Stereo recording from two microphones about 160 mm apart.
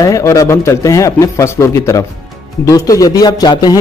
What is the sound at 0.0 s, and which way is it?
A man's voice, 20° left (ahead or behind).